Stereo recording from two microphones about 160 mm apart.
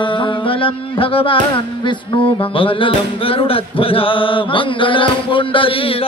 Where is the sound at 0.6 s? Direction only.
35° left (ahead or behind).